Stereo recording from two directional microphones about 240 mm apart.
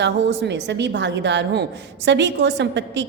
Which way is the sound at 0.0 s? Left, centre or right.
Right.